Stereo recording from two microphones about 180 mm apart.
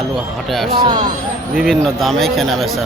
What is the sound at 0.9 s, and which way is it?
Speech, 25° right (ahead or behind).